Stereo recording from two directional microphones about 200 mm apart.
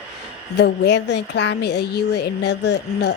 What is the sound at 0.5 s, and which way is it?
A woman's voice, 55° left (ahead or behind).